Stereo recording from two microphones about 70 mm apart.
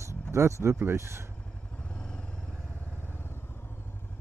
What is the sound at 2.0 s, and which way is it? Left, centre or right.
Vehicle, centre.